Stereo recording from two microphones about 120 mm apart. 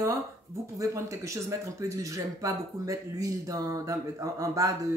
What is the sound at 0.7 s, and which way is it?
Speech, 25° right (ahead or behind).